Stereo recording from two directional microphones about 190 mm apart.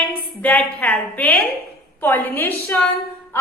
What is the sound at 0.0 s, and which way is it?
A woman's voice, 5° left (ahead or behind).